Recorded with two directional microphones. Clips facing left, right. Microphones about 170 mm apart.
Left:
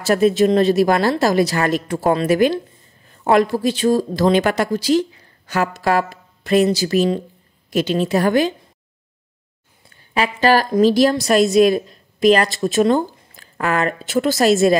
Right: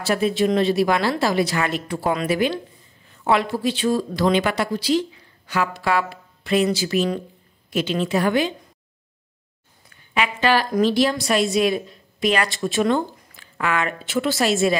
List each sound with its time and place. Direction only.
0.0 s a woman's voice: 45° left (ahead or behind)
9.8 s a sound: 35° left (ahead or behind)
10.7 s a woman's voice: 40° left (ahead or behind)